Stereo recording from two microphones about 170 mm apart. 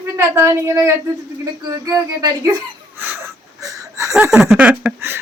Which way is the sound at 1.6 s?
20° right (ahead or behind).